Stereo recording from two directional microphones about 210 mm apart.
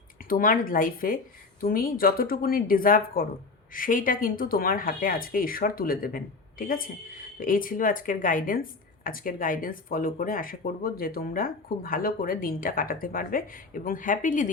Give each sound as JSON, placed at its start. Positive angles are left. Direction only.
{"t": 0.3, "sound": "speech", "side_deg": 40}